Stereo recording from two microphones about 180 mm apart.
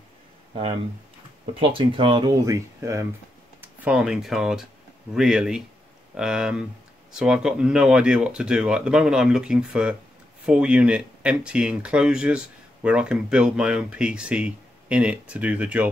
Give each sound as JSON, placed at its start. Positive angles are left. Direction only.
{"t": 1.8, "sound": "speech", "side_deg": -30}
{"t": 3.6, "sound": "speech", "side_deg": -5}